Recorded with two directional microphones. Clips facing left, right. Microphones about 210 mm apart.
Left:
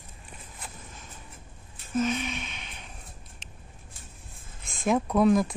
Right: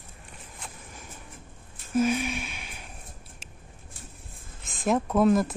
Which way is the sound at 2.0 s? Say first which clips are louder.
Right 3 dB; 10° right (ahead or behind).